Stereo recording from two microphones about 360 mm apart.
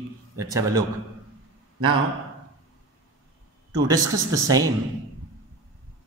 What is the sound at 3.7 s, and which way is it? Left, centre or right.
A man's voice, centre.